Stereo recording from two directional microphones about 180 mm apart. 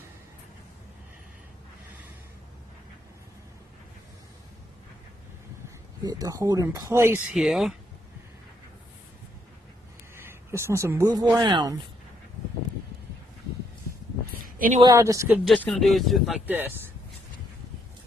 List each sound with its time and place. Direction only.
6.1 s speech: 20° right (ahead or behind)
7.3 s speech: centre (ahead or behind)
10.2 s speech: 15° right (ahead or behind)
14.4 s a sound: 50° right (ahead or behind)
14.8 s speech: 20° right (ahead or behind)
15.4 s speech: 5° left (ahead or behind)
16.6 s speech: 10° right (ahead or behind)